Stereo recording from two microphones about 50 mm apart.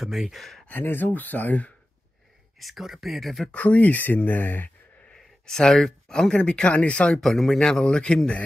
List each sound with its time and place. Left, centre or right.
0.0 s speech: centre
0.4 s speech: centre
0.7 s speech: left
2.6 s speech: centre
3.5 s speech: left
5.1 s speech: centre
7.2 s a man's voice: centre